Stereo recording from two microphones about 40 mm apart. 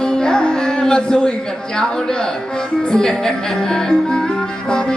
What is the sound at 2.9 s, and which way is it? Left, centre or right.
Speech, centre.